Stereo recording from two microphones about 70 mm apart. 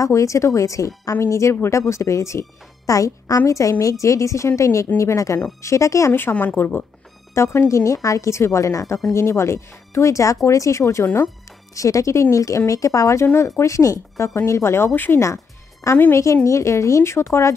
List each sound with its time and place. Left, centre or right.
0.0 s speech: left
6.3 s a woman's voice: left
7.3 s speech: left
15.1 s music: left
16.1 s speech: left